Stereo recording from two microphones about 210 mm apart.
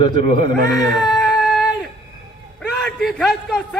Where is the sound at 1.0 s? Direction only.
Centre (ahead or behind).